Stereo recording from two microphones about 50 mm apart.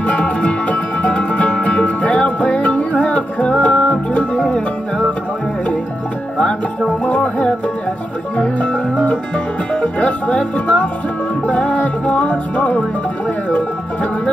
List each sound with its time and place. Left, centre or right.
0.0 s music: left
4.5 s music: centre
6.3 s music: left